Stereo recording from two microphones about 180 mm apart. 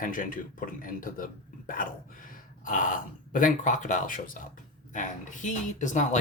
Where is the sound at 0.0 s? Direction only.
50° left (ahead or behind).